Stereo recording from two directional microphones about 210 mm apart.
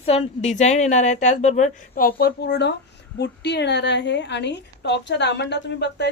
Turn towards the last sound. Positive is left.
turn(degrees=55)  # may be behind; listen again after turning